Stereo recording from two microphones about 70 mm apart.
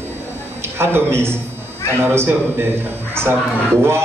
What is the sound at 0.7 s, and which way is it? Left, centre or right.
A man's voice, right.